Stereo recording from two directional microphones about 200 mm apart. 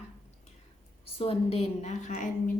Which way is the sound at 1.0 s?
30° left (ahead or behind).